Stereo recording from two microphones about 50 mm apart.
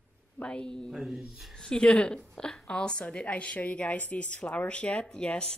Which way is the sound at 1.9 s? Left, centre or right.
Left.